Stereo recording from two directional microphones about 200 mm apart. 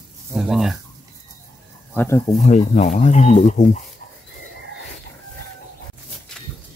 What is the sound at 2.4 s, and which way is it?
Speech, 35° left (ahead or behind).